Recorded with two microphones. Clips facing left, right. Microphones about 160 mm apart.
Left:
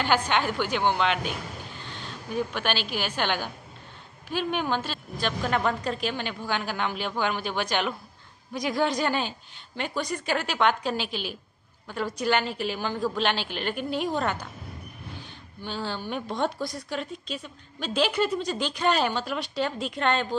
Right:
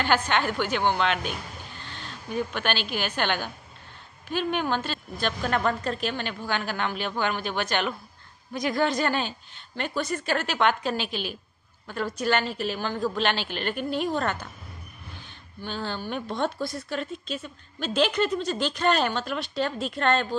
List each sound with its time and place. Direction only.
0.0 s a woman's voice: 10° left (ahead or behind)
2.3 s a woman's voice: 10° left (ahead or behind)
11.1 s a woman's voice: 50° right (ahead or behind)
11.9 s a woman's voice: 10° left (ahead or behind)
15.6 s a woman's voice: 10° left (ahead or behind)